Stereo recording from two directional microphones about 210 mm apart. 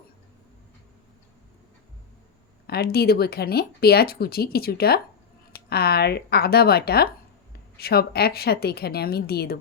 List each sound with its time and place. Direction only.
2.6 s speech: 50° left (ahead or behind)